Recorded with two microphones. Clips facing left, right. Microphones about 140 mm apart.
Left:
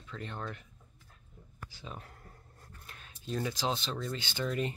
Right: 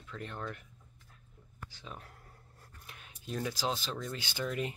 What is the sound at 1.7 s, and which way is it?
Speech, centre (ahead or behind).